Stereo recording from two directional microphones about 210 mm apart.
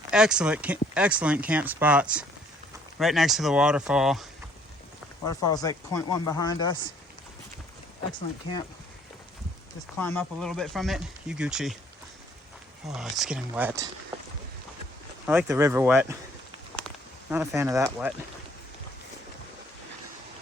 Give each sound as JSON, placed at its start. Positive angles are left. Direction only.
{"t": 0.1, "sound": "speech", "side_deg": -5}
{"t": 5.2, "sound": "speech", "side_deg": 15}
{"t": 10.0, "sound": "speech", "side_deg": 10}
{"t": 12.9, "sound": "speech", "side_deg": 0}
{"t": 15.3, "sound": "speech", "side_deg": -10}
{"t": 17.3, "sound": "speech", "side_deg": -10}